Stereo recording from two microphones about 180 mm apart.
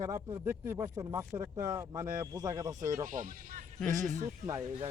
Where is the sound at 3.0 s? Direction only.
45° right (ahead or behind).